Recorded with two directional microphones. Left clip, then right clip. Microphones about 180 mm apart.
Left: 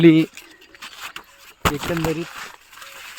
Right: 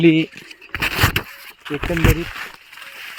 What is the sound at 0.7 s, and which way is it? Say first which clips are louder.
Vehicle: right 16 dB; 65° right (ahead or behind).